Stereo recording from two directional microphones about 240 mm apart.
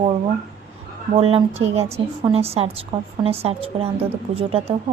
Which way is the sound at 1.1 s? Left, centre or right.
Right.